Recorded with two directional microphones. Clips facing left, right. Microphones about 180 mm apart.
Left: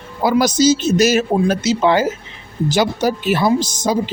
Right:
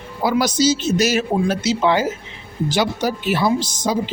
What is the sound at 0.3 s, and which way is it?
Speech, 45° left (ahead or behind).